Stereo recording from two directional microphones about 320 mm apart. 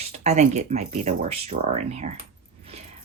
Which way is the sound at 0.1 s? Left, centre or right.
Right.